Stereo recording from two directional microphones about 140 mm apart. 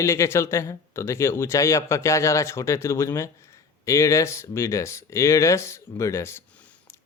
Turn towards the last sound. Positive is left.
turn(degrees=20)  # may be behind; listen again after turning